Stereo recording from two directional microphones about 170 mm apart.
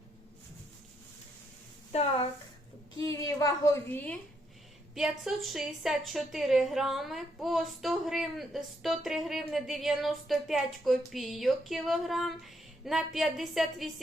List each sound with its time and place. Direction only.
2.9 s a woman's voice: 20° left (ahead or behind)
4.9 s a woman's voice: centre (ahead or behind)